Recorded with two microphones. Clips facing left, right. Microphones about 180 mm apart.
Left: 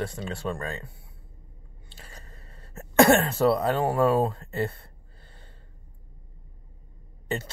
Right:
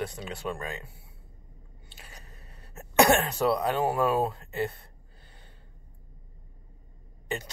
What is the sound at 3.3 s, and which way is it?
Speech, centre (ahead or behind).